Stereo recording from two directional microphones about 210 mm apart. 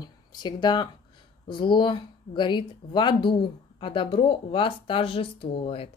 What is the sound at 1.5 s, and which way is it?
Speech, 20° left (ahead or behind).